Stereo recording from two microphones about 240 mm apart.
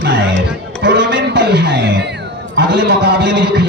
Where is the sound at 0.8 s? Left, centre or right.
Right.